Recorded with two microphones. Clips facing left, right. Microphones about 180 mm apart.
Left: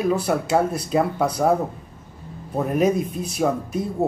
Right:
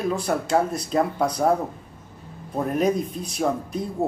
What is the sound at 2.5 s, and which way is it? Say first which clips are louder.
Speech: left 3 dB; 5° left (ahead or behind).